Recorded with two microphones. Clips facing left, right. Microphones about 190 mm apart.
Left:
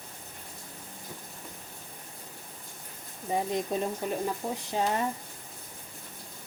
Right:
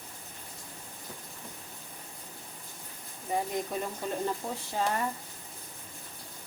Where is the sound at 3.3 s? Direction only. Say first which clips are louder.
Left 2 dB; 20° left (ahead or behind).